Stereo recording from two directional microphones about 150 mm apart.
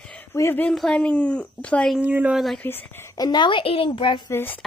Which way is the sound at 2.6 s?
15° left (ahead or behind).